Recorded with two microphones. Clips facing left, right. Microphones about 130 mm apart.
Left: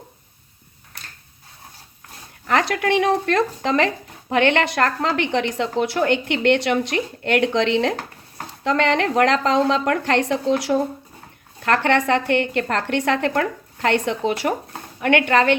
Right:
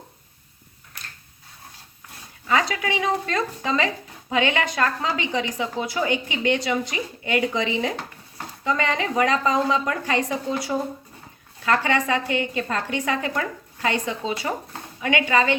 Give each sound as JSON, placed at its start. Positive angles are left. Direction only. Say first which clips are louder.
{"t": 2.5, "sound": "speech", "louder": "left 4 dB", "side_deg": 65}
{"t": 11.6, "sound": "a woman's voice", "louder": "left 3 dB", "side_deg": 65}